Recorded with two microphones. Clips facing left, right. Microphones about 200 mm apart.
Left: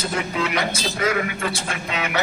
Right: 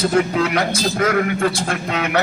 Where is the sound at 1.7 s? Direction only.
55° right (ahead or behind).